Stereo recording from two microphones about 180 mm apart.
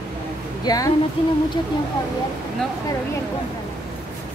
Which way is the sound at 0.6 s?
20° left (ahead or behind).